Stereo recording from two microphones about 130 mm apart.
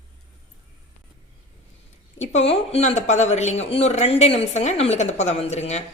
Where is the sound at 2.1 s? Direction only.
60° left (ahead or behind).